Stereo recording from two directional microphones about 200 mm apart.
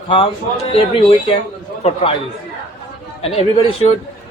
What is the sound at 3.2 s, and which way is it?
Speech, 30° left (ahead or behind).